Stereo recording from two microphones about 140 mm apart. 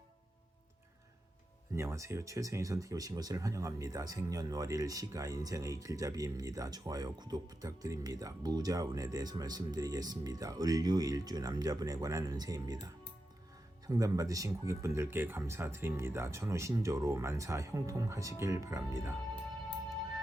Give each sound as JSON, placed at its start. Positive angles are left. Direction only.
{"t": 1.7, "sound": "speech", "side_deg": -20}